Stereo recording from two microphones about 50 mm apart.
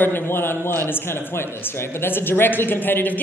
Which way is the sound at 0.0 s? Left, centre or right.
Left.